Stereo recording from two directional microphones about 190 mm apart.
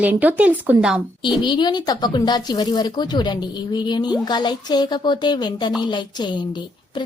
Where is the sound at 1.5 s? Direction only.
25° left (ahead or behind).